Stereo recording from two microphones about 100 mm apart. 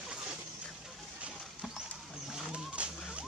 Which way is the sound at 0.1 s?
5° right (ahead or behind).